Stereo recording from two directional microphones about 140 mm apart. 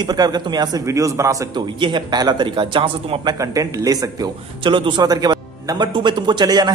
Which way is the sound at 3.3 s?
25° right (ahead or behind).